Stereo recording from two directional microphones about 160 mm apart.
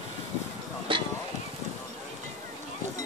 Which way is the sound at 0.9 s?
30° right (ahead or behind).